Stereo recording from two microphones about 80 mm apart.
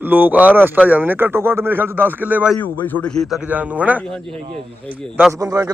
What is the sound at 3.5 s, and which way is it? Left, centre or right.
Speech, centre.